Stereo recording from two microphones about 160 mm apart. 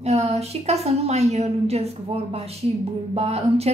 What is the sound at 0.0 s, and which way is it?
Speech, 40° right (ahead or behind).